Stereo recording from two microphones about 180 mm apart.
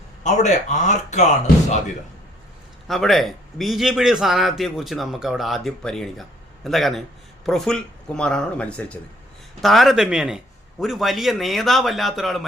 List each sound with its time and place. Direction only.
0.2 s speech: 40° left (ahead or behind)
2.8 s a man's voice: centre (ahead or behind)